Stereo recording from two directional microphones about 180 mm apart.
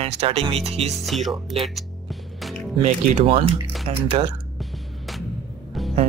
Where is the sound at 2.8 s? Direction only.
40° right (ahead or behind).